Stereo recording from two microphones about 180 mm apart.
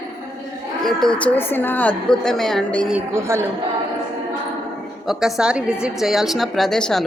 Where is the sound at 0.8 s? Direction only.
Centre (ahead or behind).